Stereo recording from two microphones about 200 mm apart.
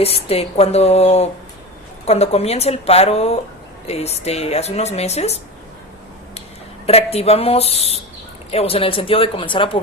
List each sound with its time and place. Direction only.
0.0 s a woman's voice: 30° left (ahead or behind)
6.8 s a woman's voice: 30° left (ahead or behind)